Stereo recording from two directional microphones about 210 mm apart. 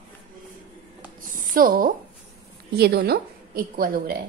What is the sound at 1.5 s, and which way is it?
A woman's voice, 40° right (ahead or behind).